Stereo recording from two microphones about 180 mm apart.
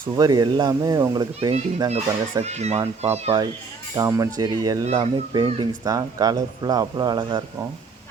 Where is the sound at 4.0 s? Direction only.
20° right (ahead or behind).